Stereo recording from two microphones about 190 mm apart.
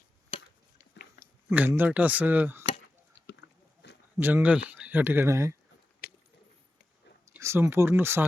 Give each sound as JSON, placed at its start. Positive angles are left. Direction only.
{"t": 0.9, "sound": "chewing", "side_deg": 45}
{"t": 1.5, "sound": "speech", "side_deg": -10}
{"t": 4.2, "sound": "speech", "side_deg": -10}
{"t": 6.0, "sound": "a sound", "side_deg": 55}
{"t": 7.3, "sound": "speech", "side_deg": -15}